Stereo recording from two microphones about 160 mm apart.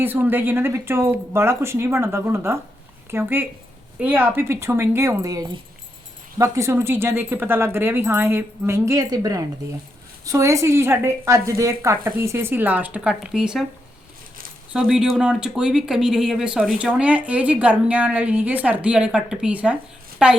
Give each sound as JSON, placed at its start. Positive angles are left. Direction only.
{"t": 0.0, "sound": "speech", "side_deg": -15}
{"t": 14.7, "sound": "speech", "side_deg": -5}